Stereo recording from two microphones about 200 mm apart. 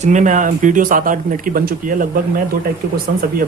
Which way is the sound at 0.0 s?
35° right (ahead or behind).